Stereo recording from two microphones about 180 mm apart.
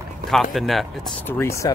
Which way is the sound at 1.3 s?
15° left (ahead or behind).